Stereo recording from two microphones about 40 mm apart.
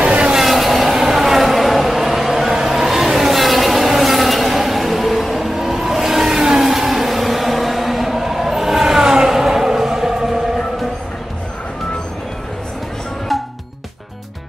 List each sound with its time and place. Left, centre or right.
0.0 s vehicle: right
0.4 s vehicle: centre
13.3 s music: centre